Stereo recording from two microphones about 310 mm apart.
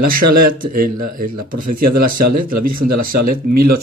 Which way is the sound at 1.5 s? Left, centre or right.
Right.